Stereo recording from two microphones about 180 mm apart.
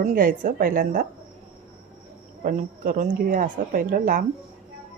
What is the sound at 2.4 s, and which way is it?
A woman's voice, 50° right (ahead or behind).